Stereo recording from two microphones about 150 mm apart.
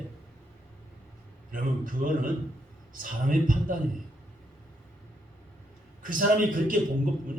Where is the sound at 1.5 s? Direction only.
65° right (ahead or behind).